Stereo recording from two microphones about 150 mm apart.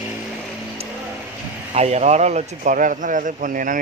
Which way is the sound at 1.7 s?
45° right (ahead or behind).